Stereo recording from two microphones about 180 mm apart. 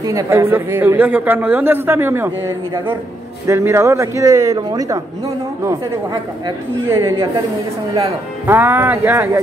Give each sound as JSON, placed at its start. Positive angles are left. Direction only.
{"t": 0.0, "sound": "a man's voice", "side_deg": -20}
{"t": 6.4, "sound": "a woman's voice", "side_deg": -20}